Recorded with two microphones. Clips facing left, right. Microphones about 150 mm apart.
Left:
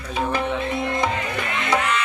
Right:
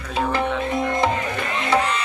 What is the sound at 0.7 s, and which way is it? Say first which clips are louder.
Music: right 2 dB; 40° right (ahead or behind).